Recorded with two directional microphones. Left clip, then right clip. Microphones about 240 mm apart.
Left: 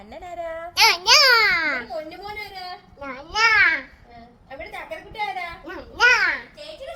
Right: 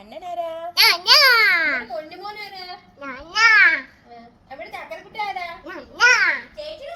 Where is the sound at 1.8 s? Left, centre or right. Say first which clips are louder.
Right 1 dB; centre.